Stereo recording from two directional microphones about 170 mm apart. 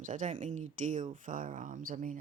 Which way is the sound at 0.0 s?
50° right (ahead or behind).